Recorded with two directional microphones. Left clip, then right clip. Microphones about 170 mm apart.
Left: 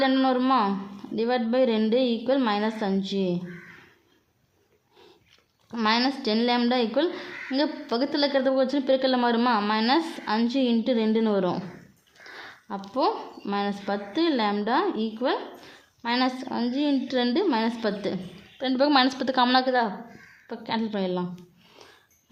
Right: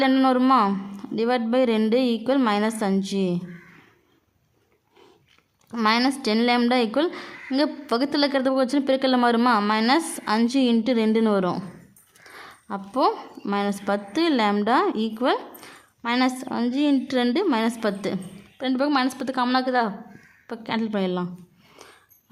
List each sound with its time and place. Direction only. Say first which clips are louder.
0.0 s a woman's voice: right 3 dB; 35° right (ahead or behind)
5.7 s a woman's voice: right 3 dB; 30° right (ahead or behind)